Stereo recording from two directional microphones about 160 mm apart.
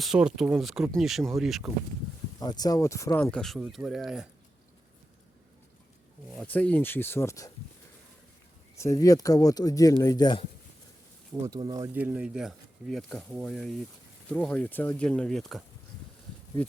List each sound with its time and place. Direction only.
0.0 s speech: 5° right (ahead or behind)
2.4 s speech: 25° left (ahead or behind)
3.3 s speech: centre (ahead or behind)
6.3 s speech: 10° left (ahead or behind)
8.8 s speech: 20° left (ahead or behind)
11.4 s speech: 25° right (ahead or behind)
11.9 s speech: 10° right (ahead or behind)